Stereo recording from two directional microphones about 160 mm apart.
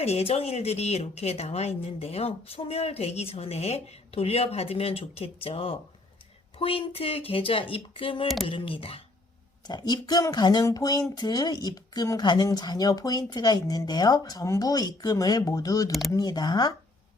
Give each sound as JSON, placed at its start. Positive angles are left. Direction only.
{"t": 0.0, "sound": "speech", "side_deg": 40}
{"t": 15.9, "sound": "speech", "side_deg": 0}
{"t": 16.1, "sound": "speech", "side_deg": 25}